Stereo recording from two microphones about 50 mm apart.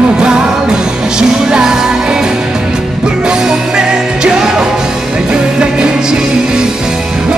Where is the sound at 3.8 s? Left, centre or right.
Centre.